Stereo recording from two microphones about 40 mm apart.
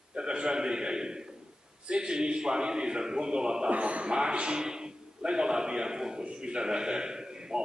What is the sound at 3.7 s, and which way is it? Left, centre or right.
Speech, right.